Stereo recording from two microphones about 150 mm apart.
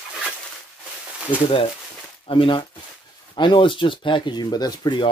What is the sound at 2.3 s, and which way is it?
Speech, 35° left (ahead or behind).